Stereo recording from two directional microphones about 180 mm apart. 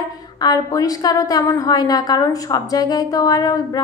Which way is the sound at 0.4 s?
20° left (ahead or behind).